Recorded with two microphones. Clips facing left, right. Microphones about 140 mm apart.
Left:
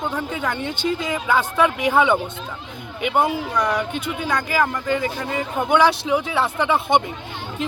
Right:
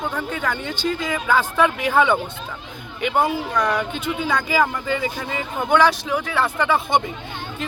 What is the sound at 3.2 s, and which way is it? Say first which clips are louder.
Speech: even; 5° left (ahead or behind).